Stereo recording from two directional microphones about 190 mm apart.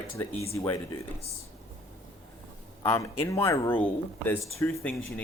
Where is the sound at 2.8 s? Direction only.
15° left (ahead or behind).